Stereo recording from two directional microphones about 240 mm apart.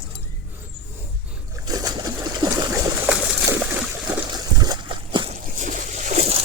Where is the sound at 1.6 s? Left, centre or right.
Centre.